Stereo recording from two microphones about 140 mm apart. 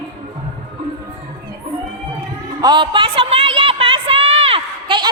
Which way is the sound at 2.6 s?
35° right (ahead or behind).